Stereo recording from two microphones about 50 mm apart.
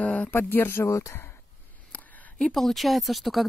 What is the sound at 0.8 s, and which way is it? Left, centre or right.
Speech, left.